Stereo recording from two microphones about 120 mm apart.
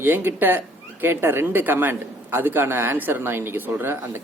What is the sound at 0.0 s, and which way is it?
A man's voice, 15° right (ahead or behind).